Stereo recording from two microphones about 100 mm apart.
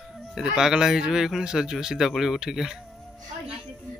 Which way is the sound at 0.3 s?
5° right (ahead or behind).